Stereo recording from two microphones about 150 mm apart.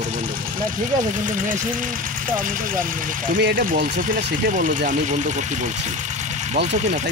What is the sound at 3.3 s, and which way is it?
Speech, 80° right.